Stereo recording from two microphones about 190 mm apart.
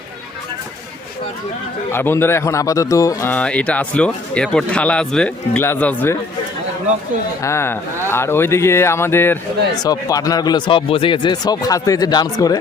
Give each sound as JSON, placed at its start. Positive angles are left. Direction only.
{"t": 1.9, "sound": "speech", "side_deg": 10}
{"t": 7.4, "sound": "speech", "side_deg": 15}